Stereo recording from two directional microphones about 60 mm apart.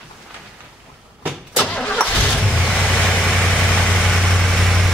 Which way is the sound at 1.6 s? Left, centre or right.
Centre.